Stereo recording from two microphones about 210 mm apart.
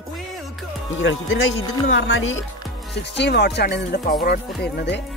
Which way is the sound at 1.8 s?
65° left (ahead or behind).